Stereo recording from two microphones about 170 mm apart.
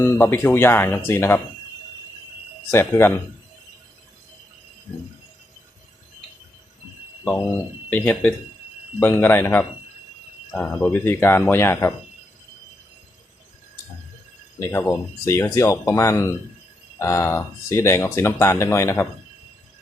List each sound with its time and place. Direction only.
0.0 s speech: 15° left (ahead or behind)
2.6 s speech: 15° left (ahead or behind)
7.9 s speech: 10° left (ahead or behind)
14.6 s speech: 10° left (ahead or behind)